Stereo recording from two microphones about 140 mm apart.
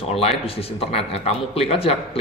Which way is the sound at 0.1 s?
45° left (ahead or behind).